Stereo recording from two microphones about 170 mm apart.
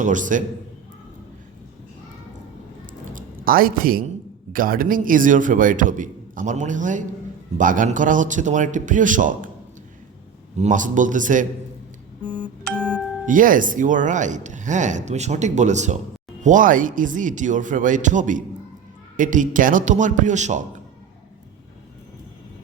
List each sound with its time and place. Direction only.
0.0 s speech: 50° right (ahead or behind)
3.1 s speech: 55° right (ahead or behind)
10.6 s speech: 50° right (ahead or behind)
12.6 s music: 5° left (ahead or behind)
13.2 s speech: 50° right (ahead or behind)